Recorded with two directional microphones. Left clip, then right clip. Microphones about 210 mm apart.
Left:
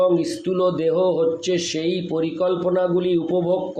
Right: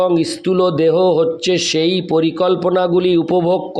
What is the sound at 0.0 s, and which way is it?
Mantra, 45° right (ahead or behind).